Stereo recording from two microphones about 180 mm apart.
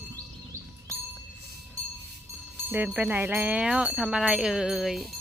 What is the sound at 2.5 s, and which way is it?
Speech, 10° right (ahead or behind).